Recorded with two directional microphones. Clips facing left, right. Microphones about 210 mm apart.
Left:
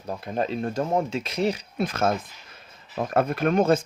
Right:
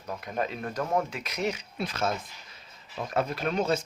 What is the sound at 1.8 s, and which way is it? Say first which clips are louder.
Speech: left 6 dB; 50° left (ahead or behind).